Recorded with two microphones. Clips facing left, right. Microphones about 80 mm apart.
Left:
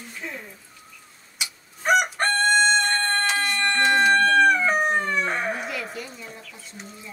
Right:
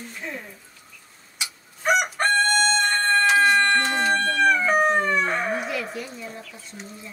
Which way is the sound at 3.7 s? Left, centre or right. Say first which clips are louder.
Left 3 dB; left.